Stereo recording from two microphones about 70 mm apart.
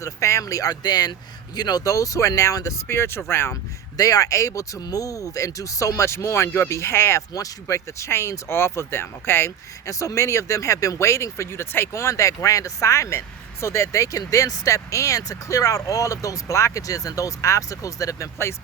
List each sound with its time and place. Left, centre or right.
0.0 s speech: left
2.8 s speech: left
3.9 s speech: left
7.2 s speech: left
9.8 s speech: left